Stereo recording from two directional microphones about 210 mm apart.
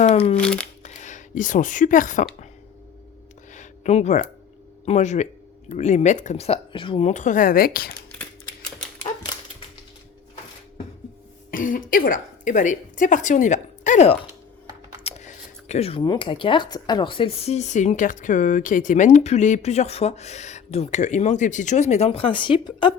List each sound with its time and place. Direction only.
0.3 s speech: 5° left (ahead or behind)
0.8 s speech: 35° left (ahead or behind)
3.5 s a sound: 35° left (ahead or behind)
4.9 s speech: 35° left (ahead or behind)
11.5 s speech: 40° left (ahead or behind); by 23.0 s 20° left (ahead or behind)